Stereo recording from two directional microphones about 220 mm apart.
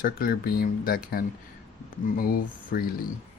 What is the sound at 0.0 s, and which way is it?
Speech, 40° left (ahead or behind).